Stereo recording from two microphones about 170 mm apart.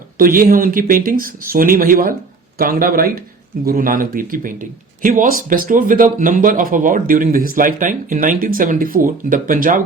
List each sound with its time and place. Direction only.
0.2 s speech: 60° right (ahead or behind)